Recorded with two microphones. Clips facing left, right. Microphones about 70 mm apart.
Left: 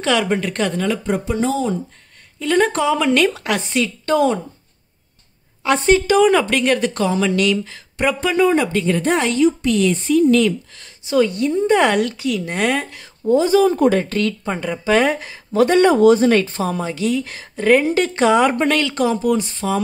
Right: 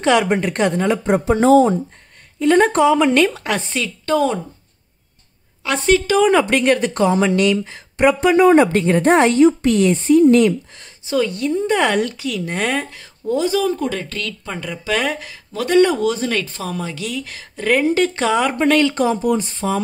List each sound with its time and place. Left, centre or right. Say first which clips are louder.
0.0 s a woman's voice: right 3 dB; centre
1.3 s a woman's voice: right 10 dB; right
2.8 s speech: right 3 dB; centre
5.6 s a woman's voice: left 2 dB; centre
6.3 s a woman's voice: right 1 dB; centre
8.4 s a woman's voice: right 4 dB; right; by 10.9 s centre
11.1 s a woman's voice: left 2 dB; centre
13.3 s speech: left 4 dB; left
15.9 s a woman's voice: left 7 dB; left; by 18.6 s centre
18.6 s speech: right 2 dB; centre